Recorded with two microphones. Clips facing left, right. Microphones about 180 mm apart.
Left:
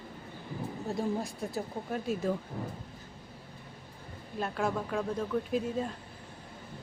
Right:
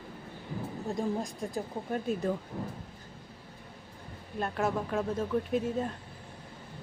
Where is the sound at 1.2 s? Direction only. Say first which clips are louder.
Right 1 dB; 15° right (ahead or behind).